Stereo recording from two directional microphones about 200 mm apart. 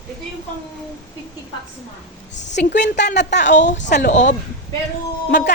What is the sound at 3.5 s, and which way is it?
Speech, 40° left (ahead or behind).